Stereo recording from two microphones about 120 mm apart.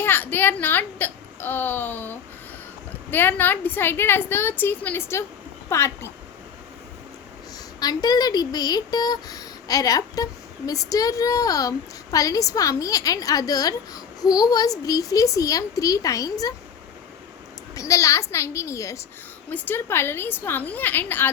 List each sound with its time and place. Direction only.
0.0 s a child's voice: 15° left (ahead or behind)
7.8 s a woman's voice: 35° left (ahead or behind)
17.7 s a woman's voice: 25° left (ahead or behind)
19.5 s a woman's voice: 15° left (ahead or behind)